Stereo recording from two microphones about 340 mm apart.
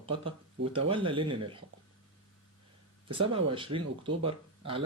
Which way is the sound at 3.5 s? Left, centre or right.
Centre.